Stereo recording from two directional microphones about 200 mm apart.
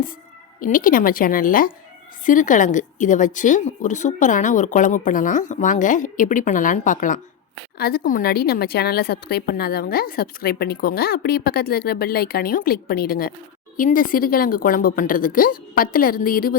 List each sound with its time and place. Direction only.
0.6 s a woman's voice: 45° left (ahead or behind)